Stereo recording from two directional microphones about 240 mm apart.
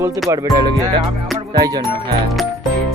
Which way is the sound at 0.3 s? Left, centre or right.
Centre.